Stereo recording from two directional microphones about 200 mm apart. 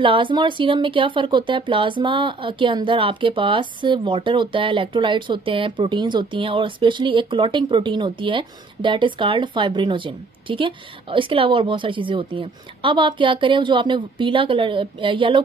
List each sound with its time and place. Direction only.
0.0 s speech: 25° right (ahead or behind)